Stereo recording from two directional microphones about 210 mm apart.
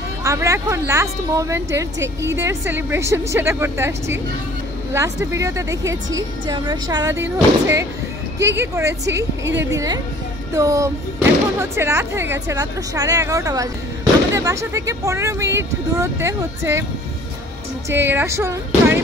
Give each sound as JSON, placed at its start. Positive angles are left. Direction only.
{"t": 0.2, "sound": "speech", "side_deg": -15}
{"t": 9.4, "sound": "a woman's voice", "side_deg": -55}
{"t": 9.7, "sound": "speech", "side_deg": -15}
{"t": 17.8, "sound": "speech", "side_deg": -10}